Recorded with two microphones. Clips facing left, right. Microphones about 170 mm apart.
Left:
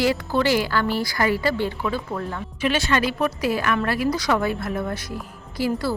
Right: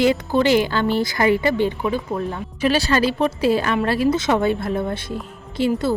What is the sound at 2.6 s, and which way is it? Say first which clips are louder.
A woman's voice: right 4 dB; 35° right (ahead or behind).